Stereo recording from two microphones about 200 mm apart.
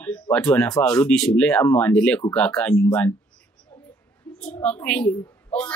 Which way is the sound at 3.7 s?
10° left (ahead or behind).